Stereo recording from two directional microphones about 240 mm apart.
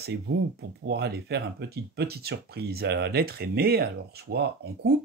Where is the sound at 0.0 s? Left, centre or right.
Right.